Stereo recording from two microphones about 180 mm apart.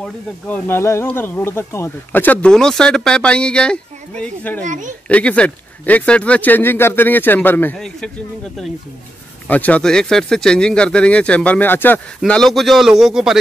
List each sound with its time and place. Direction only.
0.0 s speech: 10° left (ahead or behind)
4.6 s speech: 45° right (ahead or behind)
5.0 s speech: 5° left (ahead or behind)
9.5 s speech: 10° left (ahead or behind)